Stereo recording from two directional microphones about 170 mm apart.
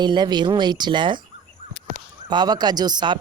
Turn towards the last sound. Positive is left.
turn(degrees=-25)  # may be behind; listen again after turning